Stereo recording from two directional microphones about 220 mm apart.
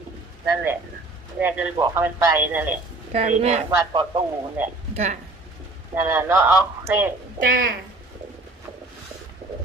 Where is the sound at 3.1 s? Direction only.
30° right (ahead or behind).